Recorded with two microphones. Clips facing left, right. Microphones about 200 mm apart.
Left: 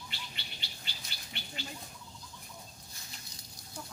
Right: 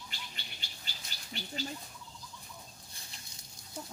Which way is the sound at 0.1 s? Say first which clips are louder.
Left 1 dB; 45° right (ahead or behind).